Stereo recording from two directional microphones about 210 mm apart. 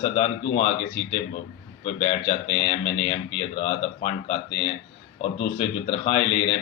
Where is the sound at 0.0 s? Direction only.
25° left (ahead or behind).